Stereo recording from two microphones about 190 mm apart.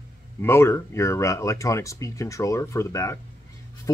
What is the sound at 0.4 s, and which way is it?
Speech, 15° left (ahead or behind).